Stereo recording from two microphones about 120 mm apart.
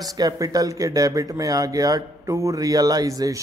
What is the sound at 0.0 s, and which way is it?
Speech, 30° right (ahead or behind).